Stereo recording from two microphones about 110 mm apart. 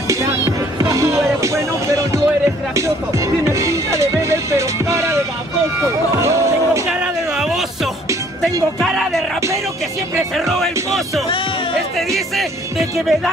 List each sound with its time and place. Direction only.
0.8 s music: 25° right (ahead or behind)
3.4 s music: 25° right (ahead or behind)
5.8 s run: 25° right (ahead or behind)
6.9 s music: 5° right (ahead or behind)
10.3 s speech: centre (ahead or behind)